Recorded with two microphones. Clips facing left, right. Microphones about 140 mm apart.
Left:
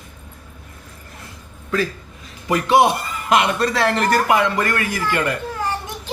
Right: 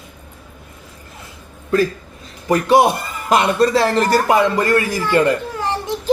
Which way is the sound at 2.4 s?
40° right (ahead or behind).